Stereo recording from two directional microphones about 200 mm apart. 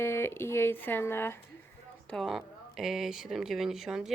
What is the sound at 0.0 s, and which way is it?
Speech, 15° left (ahead or behind).